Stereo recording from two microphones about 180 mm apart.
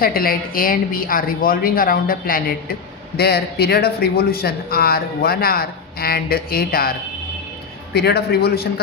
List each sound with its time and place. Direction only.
0.0 s a woman's voice: 55° left (ahead or behind)
7.9 s a man's voice: 60° left (ahead or behind)